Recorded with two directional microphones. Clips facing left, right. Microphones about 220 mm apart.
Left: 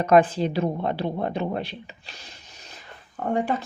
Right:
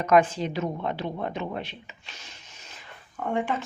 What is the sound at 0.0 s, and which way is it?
Speech, 35° left (ahead or behind).